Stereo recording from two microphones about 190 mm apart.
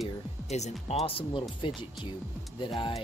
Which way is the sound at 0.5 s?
35° left (ahead or behind).